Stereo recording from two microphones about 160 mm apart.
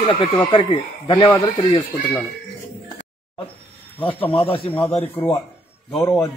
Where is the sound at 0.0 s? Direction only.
25° left (ahead or behind).